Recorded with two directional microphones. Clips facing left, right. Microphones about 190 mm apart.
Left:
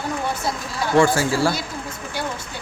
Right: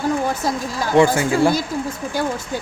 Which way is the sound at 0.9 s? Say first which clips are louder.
Right 3 dB; 20° right (ahead or behind).